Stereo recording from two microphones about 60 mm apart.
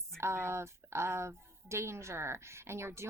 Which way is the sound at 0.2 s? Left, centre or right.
Right.